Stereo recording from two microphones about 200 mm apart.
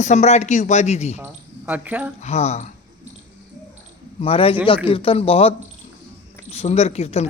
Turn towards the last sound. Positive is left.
turn(degrees=30)  # may be behind; listen again after turning